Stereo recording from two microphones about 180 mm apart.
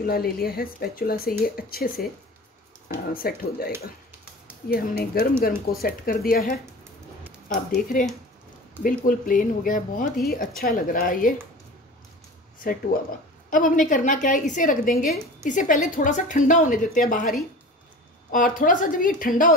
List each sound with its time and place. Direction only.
0.0 s a woman's voice: 60° left (ahead or behind)
12.6 s a woman's voice: 55° left (ahead or behind)
18.3 s a woman's voice: 50° left (ahead or behind)